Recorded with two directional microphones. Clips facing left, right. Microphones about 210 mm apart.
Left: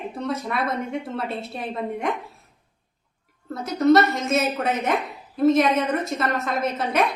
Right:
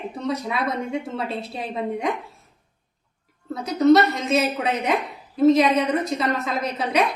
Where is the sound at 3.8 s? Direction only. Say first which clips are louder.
Right 1 dB; centre (ahead or behind).